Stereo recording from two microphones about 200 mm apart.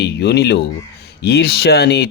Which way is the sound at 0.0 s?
55° left (ahead or behind).